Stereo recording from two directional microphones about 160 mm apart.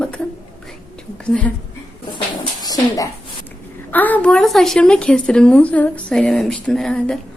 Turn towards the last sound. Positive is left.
turn(degrees=5)  # may be behind; listen again after turning